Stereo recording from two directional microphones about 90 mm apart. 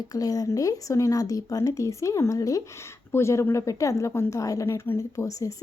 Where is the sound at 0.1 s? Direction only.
40° left (ahead or behind).